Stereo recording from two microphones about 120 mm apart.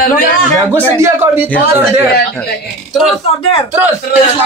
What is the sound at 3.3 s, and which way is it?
Speech, 45° left (ahead or behind).